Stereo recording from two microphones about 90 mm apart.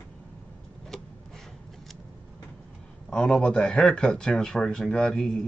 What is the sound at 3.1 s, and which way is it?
Speech, 5° left (ahead or behind).